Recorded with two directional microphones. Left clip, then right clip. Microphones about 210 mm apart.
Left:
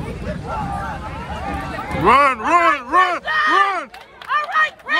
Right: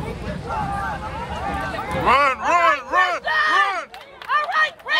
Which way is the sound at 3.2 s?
55° right (ahead or behind).